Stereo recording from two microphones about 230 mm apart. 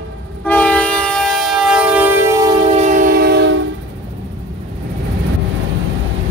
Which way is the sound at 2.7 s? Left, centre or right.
Right.